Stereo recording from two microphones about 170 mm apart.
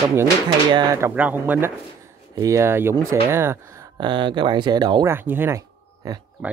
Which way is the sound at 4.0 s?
30° right (ahead or behind).